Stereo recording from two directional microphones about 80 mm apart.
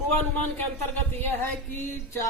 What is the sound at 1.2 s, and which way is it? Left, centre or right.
A woman's voice, left.